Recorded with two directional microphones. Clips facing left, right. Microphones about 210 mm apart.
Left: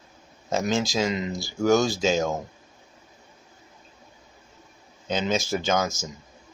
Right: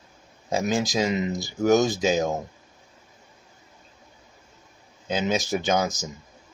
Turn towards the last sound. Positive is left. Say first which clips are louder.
# right 1 dB
turn(degrees=-15)  # may be behind; listen again after turning